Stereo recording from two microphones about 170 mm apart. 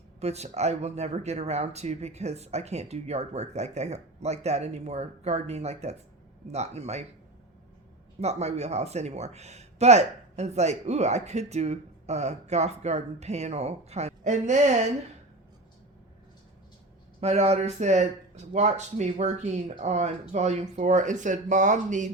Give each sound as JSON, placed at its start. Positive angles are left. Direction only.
{"t": 0.2, "sound": "speech", "side_deg": -40}
{"t": 8.2, "sound": "speech", "side_deg": -40}
{"t": 17.2, "sound": "speech", "side_deg": -40}